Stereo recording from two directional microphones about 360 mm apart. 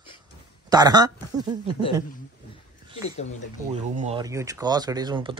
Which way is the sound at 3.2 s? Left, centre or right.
Centre.